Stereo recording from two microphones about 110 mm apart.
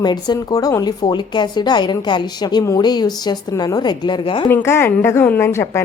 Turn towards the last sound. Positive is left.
turn(degrees=25)  # may be behind; listen again after turning